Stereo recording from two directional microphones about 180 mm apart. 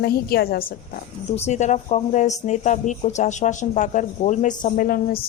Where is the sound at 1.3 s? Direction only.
40° left (ahead or behind); by 5.2 s 55° left (ahead or behind).